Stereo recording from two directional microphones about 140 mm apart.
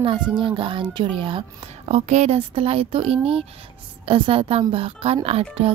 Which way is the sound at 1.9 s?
55° right (ahead or behind).